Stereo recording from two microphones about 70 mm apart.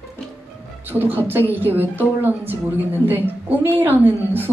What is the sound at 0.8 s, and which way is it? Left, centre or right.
A woman's voice, right.